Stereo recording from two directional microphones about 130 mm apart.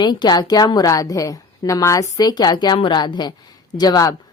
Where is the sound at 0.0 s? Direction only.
35° left (ahead or behind).